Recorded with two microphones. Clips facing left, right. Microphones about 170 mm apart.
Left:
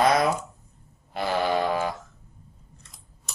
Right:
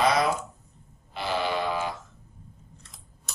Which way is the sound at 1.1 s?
45° left (ahead or behind).